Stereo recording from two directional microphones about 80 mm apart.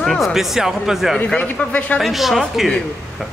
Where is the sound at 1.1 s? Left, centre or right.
Centre.